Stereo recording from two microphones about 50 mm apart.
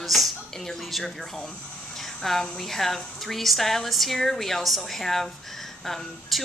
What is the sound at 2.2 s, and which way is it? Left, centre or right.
A woman's voice, centre.